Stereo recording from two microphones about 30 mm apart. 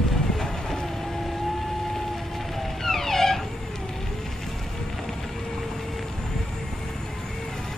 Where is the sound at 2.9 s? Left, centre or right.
Centre.